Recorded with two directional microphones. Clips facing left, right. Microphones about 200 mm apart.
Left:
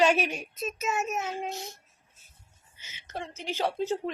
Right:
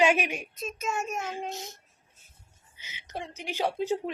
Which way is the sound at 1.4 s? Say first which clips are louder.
Left 1 dB; 20° right (ahead or behind).